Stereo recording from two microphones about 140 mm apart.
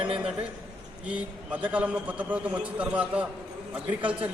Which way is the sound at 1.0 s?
10° right (ahead or behind).